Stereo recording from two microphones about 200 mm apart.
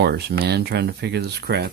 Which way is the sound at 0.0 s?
50° right (ahead or behind).